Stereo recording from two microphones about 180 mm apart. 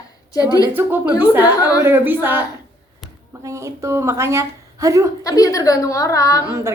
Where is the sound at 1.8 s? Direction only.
10° right (ahead or behind).